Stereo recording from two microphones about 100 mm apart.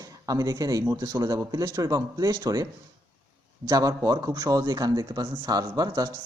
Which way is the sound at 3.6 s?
35° right (ahead or behind).